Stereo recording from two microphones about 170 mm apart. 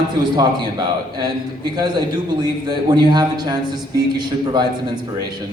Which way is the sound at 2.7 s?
25° right (ahead or behind).